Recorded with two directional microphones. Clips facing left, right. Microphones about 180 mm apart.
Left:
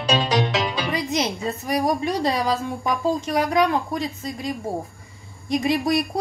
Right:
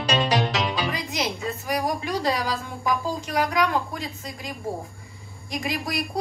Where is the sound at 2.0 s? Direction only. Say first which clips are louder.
Left 3 dB; 25° left (ahead or behind).